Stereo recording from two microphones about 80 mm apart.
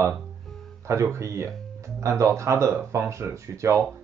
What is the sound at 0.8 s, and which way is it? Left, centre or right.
Speech, right.